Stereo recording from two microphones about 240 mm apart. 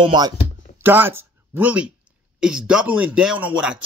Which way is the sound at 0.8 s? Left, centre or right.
Centre.